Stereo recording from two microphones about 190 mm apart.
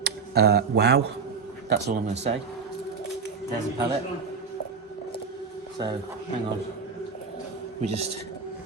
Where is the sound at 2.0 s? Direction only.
35° right (ahead or behind).